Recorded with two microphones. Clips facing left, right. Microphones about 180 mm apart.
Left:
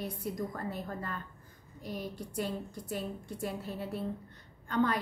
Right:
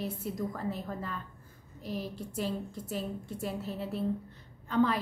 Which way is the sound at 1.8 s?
25° right (ahead or behind).